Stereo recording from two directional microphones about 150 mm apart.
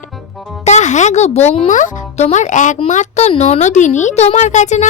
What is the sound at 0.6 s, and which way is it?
Speech, 50° left (ahead or behind).